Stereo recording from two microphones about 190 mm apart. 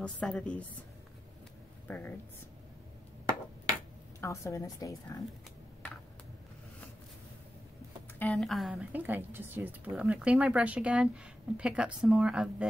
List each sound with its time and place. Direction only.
0.0 s a woman's voice: 5° left (ahead or behind)
1.9 s a woman's voice: 10° left (ahead or behind)
4.2 s a woman's voice: 15° left (ahead or behind)
8.2 s a woman's voice: centre (ahead or behind)